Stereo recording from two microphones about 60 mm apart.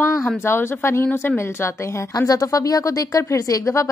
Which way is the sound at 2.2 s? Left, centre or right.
Left.